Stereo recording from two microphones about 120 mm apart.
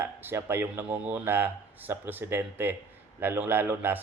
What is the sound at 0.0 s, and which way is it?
Speech, 20° right (ahead or behind).